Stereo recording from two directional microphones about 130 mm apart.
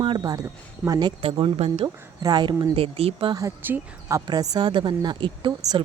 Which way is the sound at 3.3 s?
25° right (ahead or behind).